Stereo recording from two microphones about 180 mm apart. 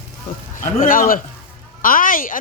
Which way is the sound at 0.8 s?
50° left (ahead or behind).